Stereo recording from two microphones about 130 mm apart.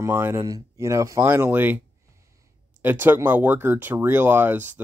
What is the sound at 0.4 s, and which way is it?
Speech, 30° right (ahead or behind).